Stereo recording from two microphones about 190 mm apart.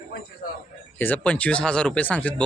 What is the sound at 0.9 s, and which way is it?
Speech, 10° left (ahead or behind).